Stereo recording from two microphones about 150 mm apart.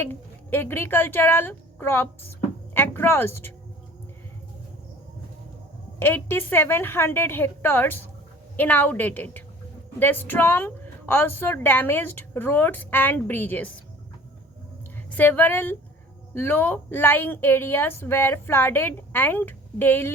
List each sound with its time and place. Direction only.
0.0 s a woman's voice: 15° left (ahead or behind)
6.0 s a woman's voice: 15° left (ahead or behind)
15.1 s a woman's voice: 10° left (ahead or behind)